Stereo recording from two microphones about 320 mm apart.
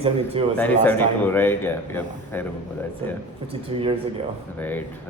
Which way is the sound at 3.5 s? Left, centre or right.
Centre.